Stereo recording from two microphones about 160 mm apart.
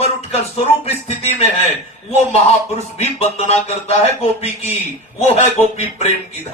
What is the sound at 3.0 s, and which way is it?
Speech, 40° left (ahead or behind).